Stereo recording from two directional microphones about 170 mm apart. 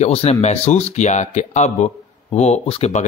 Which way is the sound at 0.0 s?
40° left (ahead or behind).